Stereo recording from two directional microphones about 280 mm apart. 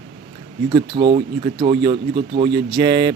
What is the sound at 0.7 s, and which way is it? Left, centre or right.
Speech, centre.